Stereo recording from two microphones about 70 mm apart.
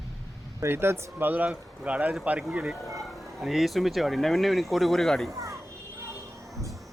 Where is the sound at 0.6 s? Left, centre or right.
Right; by 2.5 s centre.